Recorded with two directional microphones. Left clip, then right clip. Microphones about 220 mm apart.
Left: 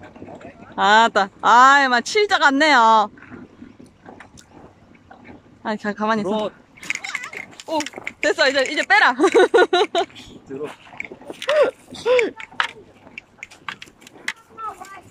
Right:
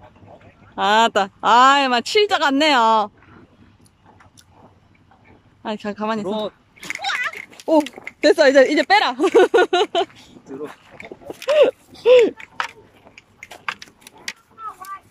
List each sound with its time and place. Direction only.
0.7 s speech: 5° right (ahead or behind)
5.6 s speech: centre (ahead or behind)
7.7 s speech: 30° right (ahead or behind); by 10.1 s 5° right (ahead or behind)
10.6 s a sound: centre (ahead or behind)
12.0 s speech: 15° right (ahead or behind)